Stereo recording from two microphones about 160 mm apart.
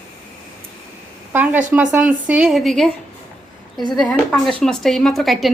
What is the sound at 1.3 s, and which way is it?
Speech, 10° right (ahead or behind).